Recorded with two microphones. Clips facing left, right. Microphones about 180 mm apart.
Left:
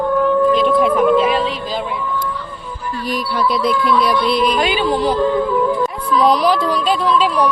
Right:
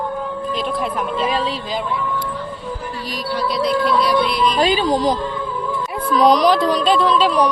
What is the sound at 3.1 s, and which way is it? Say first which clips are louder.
Speech: left 4 dB; 55° left (ahead or behind).